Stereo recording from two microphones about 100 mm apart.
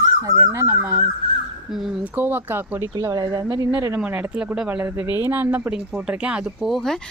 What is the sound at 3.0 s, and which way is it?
Speech, 35° right (ahead or behind).